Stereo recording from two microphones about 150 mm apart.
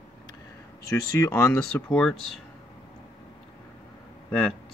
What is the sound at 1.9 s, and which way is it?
Speech, 5° left (ahead or behind).